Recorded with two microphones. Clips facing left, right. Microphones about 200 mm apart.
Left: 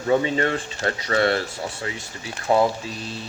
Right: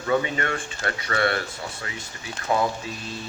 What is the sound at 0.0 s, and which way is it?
Speech, 30° left (ahead or behind).